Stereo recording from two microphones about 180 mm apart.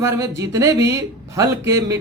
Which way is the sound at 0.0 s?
15° right (ahead or behind).